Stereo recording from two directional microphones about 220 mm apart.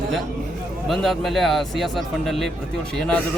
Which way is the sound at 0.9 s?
Centre (ahead or behind).